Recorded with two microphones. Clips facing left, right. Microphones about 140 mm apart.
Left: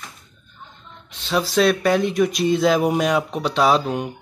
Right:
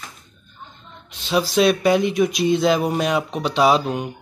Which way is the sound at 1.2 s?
5° right (ahead or behind).